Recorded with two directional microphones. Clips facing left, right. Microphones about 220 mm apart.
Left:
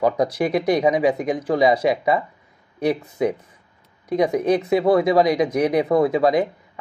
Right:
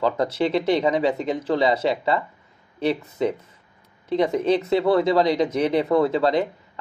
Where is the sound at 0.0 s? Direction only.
15° left (ahead or behind).